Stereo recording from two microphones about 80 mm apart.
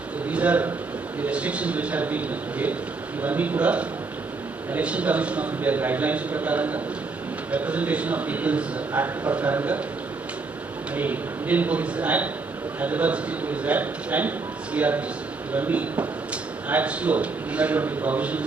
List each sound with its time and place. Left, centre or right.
0.3 s a sound: centre
1.2 s a man's voice: centre
10.9 s a man's voice: right